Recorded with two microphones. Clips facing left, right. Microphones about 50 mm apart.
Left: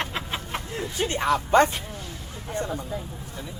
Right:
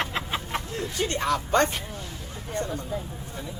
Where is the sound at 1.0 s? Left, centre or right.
Centre.